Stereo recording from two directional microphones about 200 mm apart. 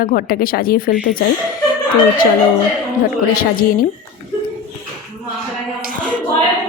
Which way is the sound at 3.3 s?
45° left (ahead or behind).